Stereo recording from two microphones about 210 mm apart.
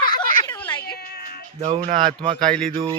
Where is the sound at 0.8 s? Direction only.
50° left (ahead or behind).